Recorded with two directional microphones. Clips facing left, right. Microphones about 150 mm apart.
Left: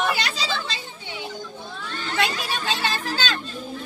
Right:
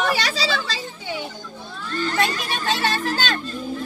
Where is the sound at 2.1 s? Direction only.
50° right (ahead or behind).